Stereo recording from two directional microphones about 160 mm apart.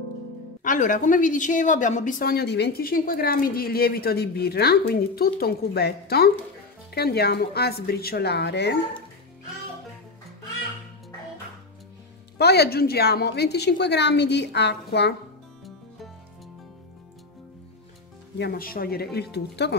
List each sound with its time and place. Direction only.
0.7 s a woman's voice: 55° left (ahead or behind); by 8.7 s 90° left
12.4 s a woman's voice: 90° left
18.4 s speech: 70° left (ahead or behind); by 19.7 s 90° left